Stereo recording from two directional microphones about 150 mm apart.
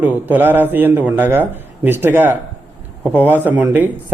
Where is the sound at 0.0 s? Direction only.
10° right (ahead or behind).